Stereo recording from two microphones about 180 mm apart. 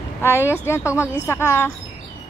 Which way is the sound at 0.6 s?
15° left (ahead or behind).